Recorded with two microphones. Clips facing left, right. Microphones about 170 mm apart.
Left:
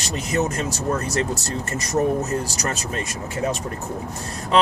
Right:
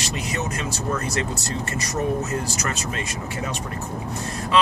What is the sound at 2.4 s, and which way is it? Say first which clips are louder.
Speech: left 1 dB; 40° left (ahead or behind).